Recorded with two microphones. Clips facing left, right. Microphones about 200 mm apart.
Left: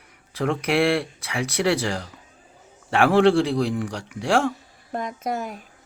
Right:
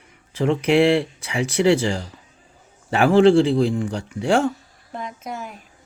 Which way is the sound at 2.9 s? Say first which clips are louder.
Right 3 dB; centre (ahead or behind).